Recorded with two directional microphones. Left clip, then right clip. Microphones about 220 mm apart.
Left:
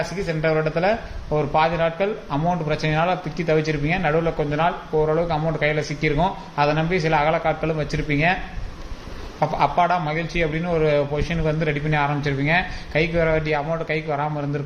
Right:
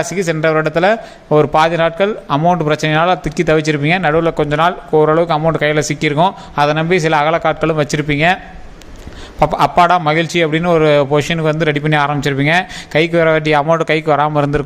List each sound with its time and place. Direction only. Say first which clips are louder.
0.0 s speech: right 8 dB; 50° right (ahead or behind)
9.4 s speech: right 8 dB; 50° right (ahead or behind)